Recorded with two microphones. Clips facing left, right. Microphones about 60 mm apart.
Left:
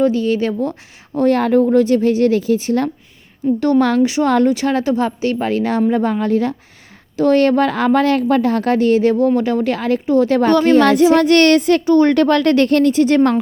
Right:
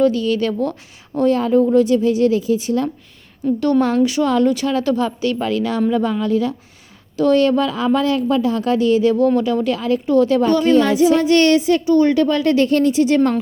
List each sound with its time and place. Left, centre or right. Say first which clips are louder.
0.0 s speech: left 1 dB; left
1.3 s speech: left 1 dB; left
3.4 s a woman's voice: left 2 dB; centre
3.8 s speech: left 2 dB; left
4.0 s speech: left 2 dB; left
9.1 s speech: left 1 dB; left